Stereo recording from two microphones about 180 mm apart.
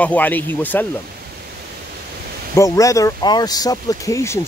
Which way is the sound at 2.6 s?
20° left (ahead or behind).